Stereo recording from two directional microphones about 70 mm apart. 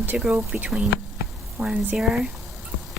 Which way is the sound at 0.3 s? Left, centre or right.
Right.